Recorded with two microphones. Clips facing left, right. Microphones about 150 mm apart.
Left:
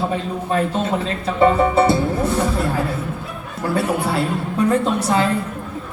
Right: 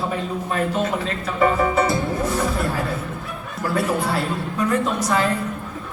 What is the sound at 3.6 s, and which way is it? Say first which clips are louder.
Speech: left 2 dB; 30° left (ahead or behind).